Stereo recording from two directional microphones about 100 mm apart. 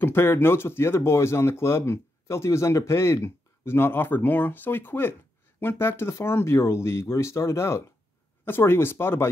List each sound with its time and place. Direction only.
0.0 s speech: 25° left (ahead or behind)